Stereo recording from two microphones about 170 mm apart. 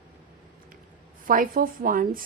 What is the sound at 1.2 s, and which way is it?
A woman's voice, 55° right (ahead or behind).